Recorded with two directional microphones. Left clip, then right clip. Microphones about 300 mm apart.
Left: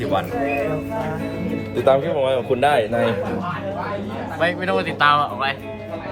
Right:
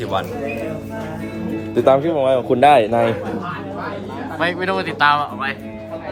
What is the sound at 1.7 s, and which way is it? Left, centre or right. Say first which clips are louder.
Speech: right 3 dB; right.